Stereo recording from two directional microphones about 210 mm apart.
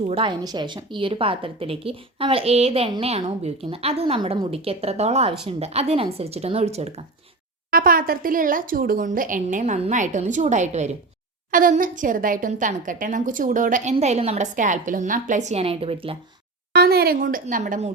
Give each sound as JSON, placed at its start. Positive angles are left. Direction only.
{"t": 0.1, "sound": "a woman's voice", "side_deg": -20}
{"t": 7.7, "sound": "speech", "side_deg": -45}
{"t": 16.7, "sound": "speech", "side_deg": -50}